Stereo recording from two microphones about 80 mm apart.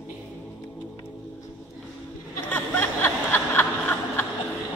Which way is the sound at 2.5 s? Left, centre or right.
Left.